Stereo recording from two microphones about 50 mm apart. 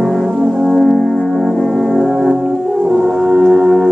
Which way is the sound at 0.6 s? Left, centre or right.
Centre.